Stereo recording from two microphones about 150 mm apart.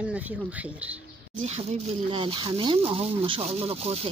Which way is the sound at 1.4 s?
45° right (ahead or behind).